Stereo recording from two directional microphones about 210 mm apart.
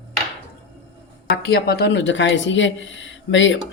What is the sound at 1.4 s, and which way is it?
Speech, 50° left (ahead or behind).